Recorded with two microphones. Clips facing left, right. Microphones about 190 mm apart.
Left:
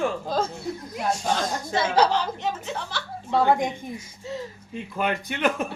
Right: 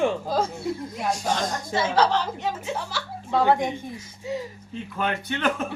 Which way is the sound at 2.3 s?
10° right (ahead or behind).